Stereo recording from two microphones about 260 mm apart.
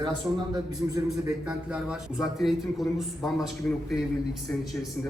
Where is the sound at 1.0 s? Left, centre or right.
Centre.